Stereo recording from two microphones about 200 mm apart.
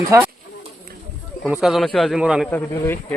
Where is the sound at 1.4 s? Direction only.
Centre (ahead or behind).